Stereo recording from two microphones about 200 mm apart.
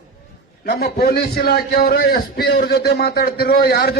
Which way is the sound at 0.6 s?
50° left (ahead or behind).